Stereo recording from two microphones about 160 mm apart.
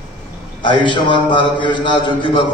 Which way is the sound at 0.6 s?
30° left (ahead or behind).